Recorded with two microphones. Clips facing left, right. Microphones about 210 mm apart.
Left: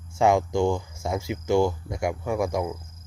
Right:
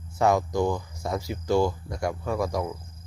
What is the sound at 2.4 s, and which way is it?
Speech, 25° left (ahead or behind).